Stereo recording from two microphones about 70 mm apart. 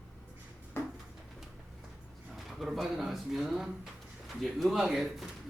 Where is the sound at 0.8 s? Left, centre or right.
Left.